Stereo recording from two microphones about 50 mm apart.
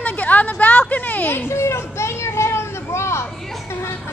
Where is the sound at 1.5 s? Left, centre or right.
Left.